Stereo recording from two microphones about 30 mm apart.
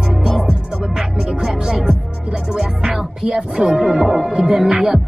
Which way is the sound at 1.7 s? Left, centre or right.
Right.